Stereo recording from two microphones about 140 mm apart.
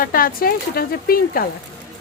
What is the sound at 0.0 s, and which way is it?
Speech, 90° left.